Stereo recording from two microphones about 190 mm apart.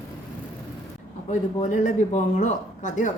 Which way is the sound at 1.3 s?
40° left (ahead or behind).